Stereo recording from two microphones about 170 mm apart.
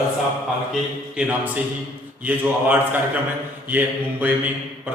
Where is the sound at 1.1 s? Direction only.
5° right (ahead or behind).